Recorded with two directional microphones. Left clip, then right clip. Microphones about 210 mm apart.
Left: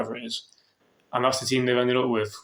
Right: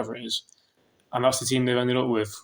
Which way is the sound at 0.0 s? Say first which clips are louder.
Right 1 dB; 45° right (ahead or behind).